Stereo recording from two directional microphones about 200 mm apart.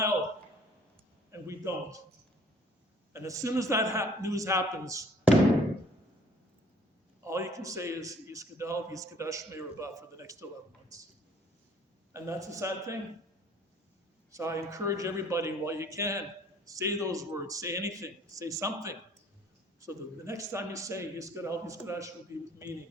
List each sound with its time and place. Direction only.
1.3 s a sound: 15° right (ahead or behind)
3.1 s a man's voice: 15° right (ahead or behind)
7.3 s a man's voice: 15° right (ahead or behind)
12.1 s a man's voice: 15° right (ahead or behind)
14.3 s a man's voice: 15° right (ahead or behind)